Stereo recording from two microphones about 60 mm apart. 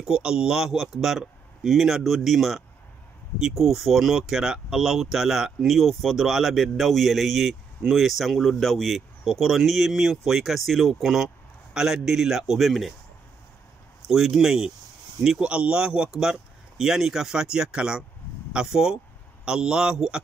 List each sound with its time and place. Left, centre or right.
0.0 s speech: centre
14.0 s speech: centre
16.1 s speech: centre